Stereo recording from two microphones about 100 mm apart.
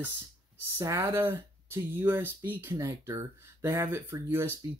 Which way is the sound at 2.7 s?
30° right (ahead or behind).